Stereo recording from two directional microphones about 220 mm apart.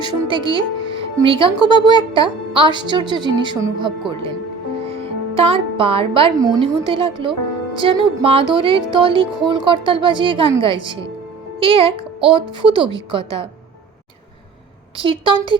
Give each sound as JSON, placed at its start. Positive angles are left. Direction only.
{"t": 0.3, "sound": "speech", "side_deg": -20}
{"t": 14.9, "sound": "speech", "side_deg": -25}